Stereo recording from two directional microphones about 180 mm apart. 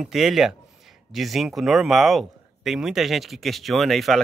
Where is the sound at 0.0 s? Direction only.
Centre (ahead or behind).